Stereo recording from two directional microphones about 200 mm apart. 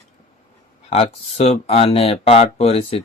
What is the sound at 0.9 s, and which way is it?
Speech, 30° left (ahead or behind).